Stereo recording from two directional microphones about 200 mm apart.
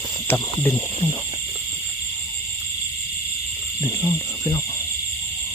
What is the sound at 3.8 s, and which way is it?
Speech, 15° left (ahead or behind).